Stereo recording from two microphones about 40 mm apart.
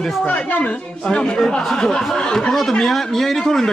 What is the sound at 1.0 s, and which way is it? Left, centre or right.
Speech, centre.